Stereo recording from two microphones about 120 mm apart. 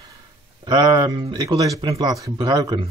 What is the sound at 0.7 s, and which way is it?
Speech, 35° right (ahead or behind).